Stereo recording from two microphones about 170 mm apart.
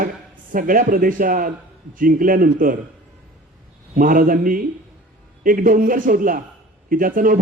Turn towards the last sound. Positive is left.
turn(degrees=-55)  # may be behind; listen again after turning